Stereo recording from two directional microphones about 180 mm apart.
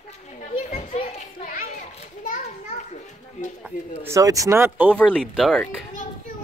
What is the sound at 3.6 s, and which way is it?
Speech, 15° right (ahead or behind).